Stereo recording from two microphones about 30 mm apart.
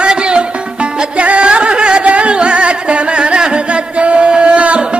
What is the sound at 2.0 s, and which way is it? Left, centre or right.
Music, right.